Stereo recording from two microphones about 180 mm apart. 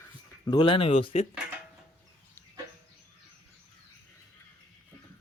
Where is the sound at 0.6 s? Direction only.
30° left (ahead or behind).